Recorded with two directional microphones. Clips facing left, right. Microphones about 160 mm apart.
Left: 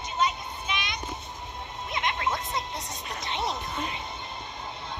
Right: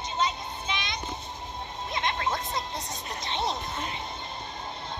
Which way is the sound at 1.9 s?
35° right (ahead or behind).